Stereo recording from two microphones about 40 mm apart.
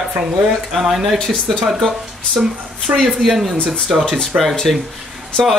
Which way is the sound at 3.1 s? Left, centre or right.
Centre.